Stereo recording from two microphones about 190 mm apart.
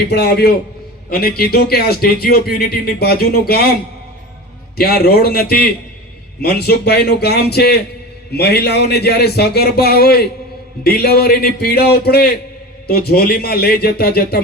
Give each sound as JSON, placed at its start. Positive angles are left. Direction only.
{"t": 0.1, "sound": "a man's voice", "side_deg": 55}
{"t": 4.8, "sound": "a man's voice", "side_deg": 55}